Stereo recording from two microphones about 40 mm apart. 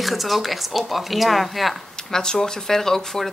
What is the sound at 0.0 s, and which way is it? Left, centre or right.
Speech, centre.